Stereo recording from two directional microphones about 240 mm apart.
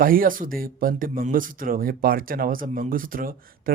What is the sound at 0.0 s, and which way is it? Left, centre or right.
A man's voice, right.